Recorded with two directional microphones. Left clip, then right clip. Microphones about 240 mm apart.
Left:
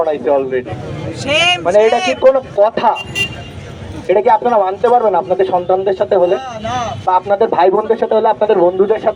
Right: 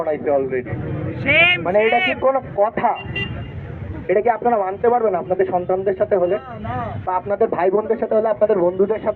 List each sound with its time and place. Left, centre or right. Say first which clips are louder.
0.0 s a man's voice: left 5 dB; left
1.2 s a man's voice: left 2 dB; centre
1.6 s a man's voice: left 5 dB; left